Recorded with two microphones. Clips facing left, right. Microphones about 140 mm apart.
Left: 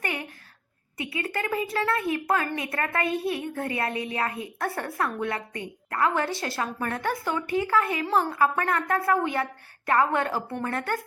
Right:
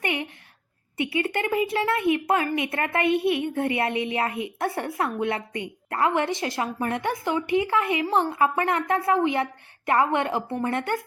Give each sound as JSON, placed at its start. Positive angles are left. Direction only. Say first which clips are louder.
{"t": 0.0, "sound": "a woman's voice", "louder": "right 4 dB", "side_deg": -20}